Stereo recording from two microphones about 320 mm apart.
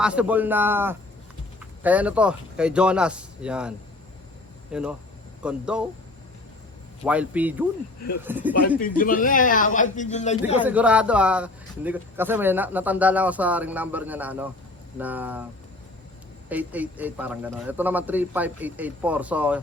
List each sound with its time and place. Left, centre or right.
0.0 s a man's voice: centre
7.0 s a man's voice: centre
8.8 s speech: left
10.6 s a man's voice: centre
16.5 s a man's voice: centre